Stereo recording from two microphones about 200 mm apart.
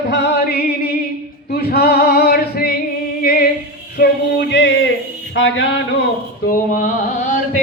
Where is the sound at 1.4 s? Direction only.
55° left (ahead or behind).